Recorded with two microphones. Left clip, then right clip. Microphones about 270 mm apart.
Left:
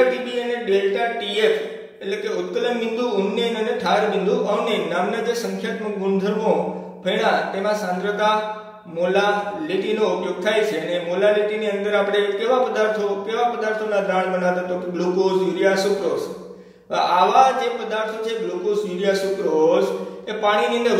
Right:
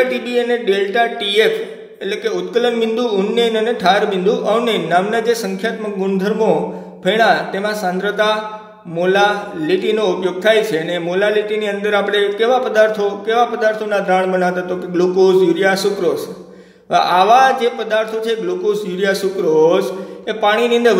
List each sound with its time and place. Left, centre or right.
0.3 s speech: right
16.9 s speech: right
20.4 s speech: right